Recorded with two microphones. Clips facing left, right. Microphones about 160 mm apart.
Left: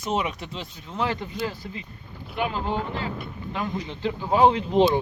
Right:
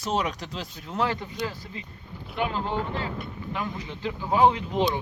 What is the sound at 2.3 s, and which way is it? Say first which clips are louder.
Speech: left 1 dB; 10° left (ahead or behind).